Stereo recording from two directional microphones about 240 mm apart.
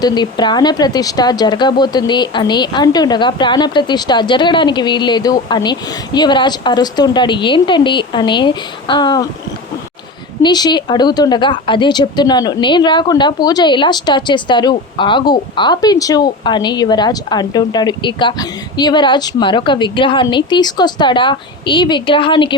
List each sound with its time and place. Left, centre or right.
0.0 s a woman's voice: centre
10.4 s a woman's voice: centre